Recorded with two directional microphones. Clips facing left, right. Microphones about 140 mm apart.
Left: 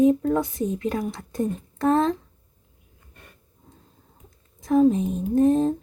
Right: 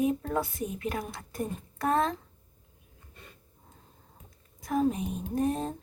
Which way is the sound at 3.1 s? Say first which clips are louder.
Left 1 dB; 55° left (ahead or behind).